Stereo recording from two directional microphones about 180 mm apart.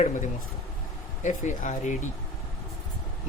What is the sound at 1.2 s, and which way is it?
Speech, 45° left (ahead or behind).